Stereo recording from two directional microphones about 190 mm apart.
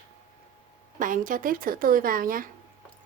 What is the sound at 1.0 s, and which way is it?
A woman's voice, 45° right (ahead or behind).